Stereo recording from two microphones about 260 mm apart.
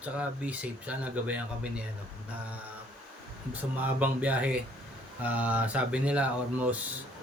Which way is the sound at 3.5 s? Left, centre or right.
Centre.